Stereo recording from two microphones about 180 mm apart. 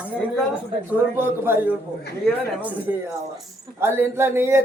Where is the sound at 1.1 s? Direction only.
10° right (ahead or behind).